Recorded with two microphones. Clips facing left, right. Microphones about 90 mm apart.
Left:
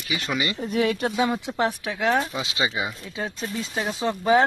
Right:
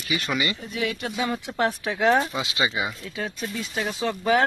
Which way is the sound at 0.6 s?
45° left (ahead or behind).